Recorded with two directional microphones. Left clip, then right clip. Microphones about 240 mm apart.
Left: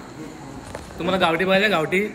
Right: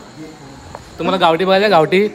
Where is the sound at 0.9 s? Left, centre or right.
Right.